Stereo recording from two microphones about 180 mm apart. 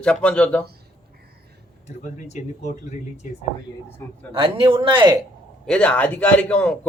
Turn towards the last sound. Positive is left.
turn(degrees=5)  # may be behind; listen again after turning